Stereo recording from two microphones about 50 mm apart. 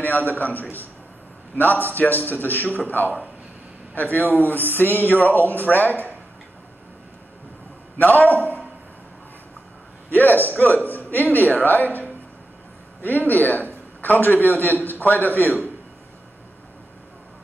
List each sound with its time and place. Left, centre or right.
0.0 s speech: left
2.0 s speech: left
8.0 s speech: left
10.0 s a man's voice: left